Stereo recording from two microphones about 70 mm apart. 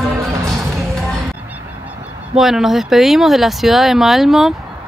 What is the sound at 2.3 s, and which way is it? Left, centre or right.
Speech, centre.